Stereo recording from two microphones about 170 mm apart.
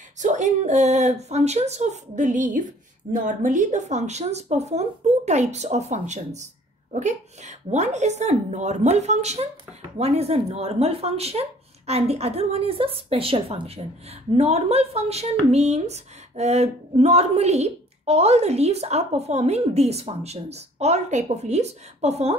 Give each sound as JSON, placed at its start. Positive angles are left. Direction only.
{"t": 0.2, "sound": "speech", "side_deg": -45}